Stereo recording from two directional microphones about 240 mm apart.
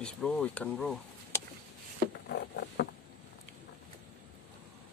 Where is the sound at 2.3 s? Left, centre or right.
Left.